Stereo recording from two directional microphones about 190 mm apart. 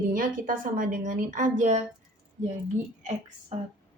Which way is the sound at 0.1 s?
45° right (ahead or behind).